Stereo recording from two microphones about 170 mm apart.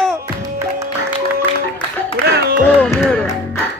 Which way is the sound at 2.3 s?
70° right (ahead or behind).